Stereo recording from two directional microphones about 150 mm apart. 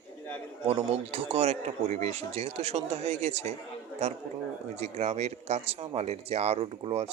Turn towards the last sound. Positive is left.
turn(degrees=-40)  # may be behind; listen again after turning